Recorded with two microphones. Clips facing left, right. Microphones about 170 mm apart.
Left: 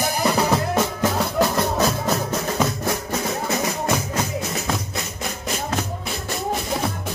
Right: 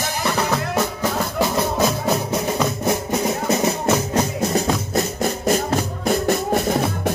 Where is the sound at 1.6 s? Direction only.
10° right (ahead or behind).